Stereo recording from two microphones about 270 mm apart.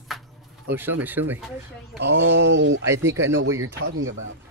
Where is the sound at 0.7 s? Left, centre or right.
Centre.